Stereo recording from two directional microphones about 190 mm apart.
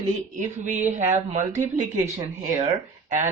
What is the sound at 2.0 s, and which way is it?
Speech, 20° right (ahead or behind).